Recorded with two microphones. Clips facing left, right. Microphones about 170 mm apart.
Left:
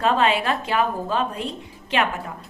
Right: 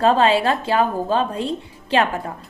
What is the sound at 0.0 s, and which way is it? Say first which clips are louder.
A woman's voice: right 4 dB; 30° right (ahead or behind).